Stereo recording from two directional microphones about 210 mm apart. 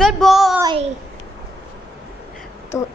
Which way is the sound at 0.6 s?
25° right (ahead or behind).